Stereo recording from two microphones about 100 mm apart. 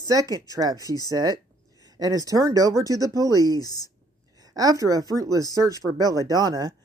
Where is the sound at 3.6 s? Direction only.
40° left (ahead or behind).